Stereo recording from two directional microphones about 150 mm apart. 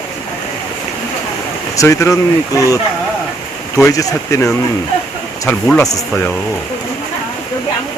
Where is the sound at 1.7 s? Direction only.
20° left (ahead or behind).